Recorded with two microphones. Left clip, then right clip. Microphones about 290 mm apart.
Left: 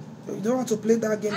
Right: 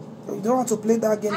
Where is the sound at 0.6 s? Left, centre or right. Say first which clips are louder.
Right 1 dB; centre.